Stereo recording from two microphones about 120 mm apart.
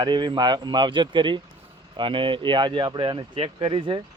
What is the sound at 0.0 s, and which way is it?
Speech, 40° right (ahead or behind).